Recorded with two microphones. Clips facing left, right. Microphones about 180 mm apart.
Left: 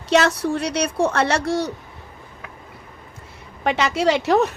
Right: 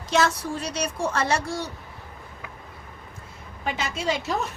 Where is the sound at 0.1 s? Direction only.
70° left (ahead or behind).